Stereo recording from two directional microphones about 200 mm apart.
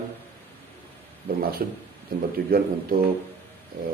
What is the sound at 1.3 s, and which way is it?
Speech, 50° right (ahead or behind).